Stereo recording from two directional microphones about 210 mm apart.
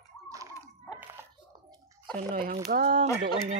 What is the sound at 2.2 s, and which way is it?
Speech, 45° right (ahead or behind).